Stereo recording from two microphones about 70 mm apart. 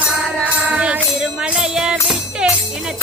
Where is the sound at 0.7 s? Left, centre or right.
Centre.